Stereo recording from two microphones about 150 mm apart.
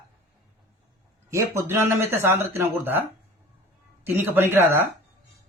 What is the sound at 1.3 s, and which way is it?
Speech, 20° right (ahead or behind).